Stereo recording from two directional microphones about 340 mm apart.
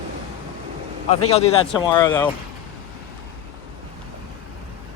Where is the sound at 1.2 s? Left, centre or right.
Centre.